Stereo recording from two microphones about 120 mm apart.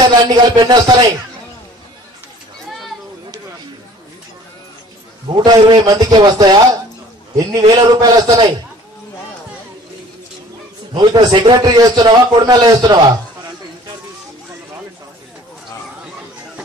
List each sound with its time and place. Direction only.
0.3 s a man's voice: 35° right (ahead or behind)
5.4 s a man's voice: 35° right (ahead or behind)
11.0 s a man's voice: 40° right (ahead or behind)